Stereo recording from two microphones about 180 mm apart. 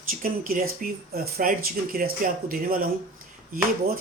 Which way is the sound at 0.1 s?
50° right (ahead or behind).